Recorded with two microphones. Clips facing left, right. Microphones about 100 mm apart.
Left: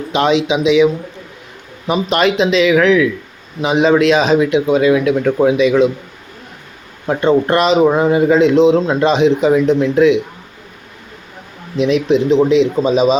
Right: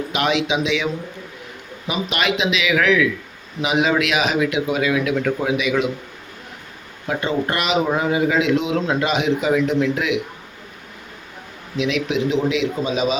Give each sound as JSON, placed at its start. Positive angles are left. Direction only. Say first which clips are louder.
{"t": 0.1, "sound": "speech", "louder": "left 7 dB", "side_deg": 25}
{"t": 1.9, "sound": "speech", "louder": "left 8 dB", "side_deg": 40}
{"t": 7.1, "sound": "speech", "louder": "left 9 dB", "side_deg": 40}
{"t": 11.8, "sound": "speech", "louder": "left 8 dB", "side_deg": 40}